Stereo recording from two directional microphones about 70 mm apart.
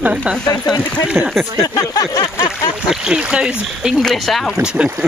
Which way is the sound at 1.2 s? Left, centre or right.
Right.